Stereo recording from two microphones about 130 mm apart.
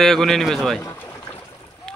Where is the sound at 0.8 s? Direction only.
20° left (ahead or behind).